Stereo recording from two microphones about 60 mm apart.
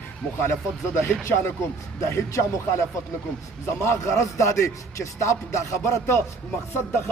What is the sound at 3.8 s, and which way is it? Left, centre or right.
Speech, left.